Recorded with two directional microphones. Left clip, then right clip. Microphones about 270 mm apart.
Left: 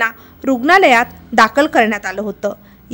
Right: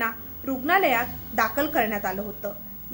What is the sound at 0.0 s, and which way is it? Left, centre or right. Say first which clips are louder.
A woman's voice: left 11 dB; left.